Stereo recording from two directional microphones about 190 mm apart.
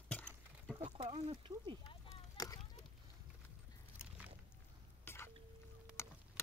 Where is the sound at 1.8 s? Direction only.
25° left (ahead or behind).